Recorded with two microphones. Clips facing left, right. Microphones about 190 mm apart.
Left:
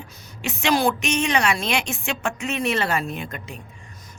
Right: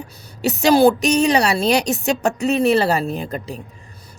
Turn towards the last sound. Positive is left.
turn(degrees=-35)  # may be behind; listen again after turning